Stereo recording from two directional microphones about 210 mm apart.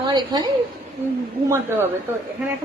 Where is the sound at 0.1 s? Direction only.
20° right (ahead or behind).